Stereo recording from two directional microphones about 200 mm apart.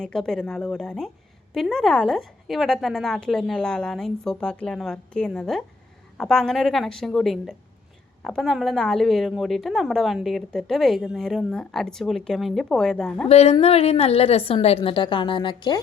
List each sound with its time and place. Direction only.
0.0 s a woman's voice: 5° left (ahead or behind)
13.2 s a woman's voice: 30° left (ahead or behind)